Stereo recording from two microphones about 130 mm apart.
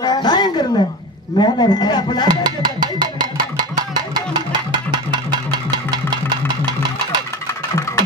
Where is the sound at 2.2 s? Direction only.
35° right (ahead or behind).